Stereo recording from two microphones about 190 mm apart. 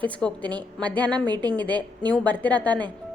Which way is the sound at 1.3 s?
20° right (ahead or behind).